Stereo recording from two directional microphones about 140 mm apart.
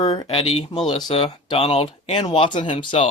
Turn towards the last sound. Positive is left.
turn(degrees=50)  # may be behind; listen again after turning